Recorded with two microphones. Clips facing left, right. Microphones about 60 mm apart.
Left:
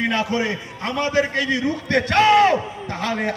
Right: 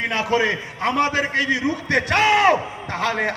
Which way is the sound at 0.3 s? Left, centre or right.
Right.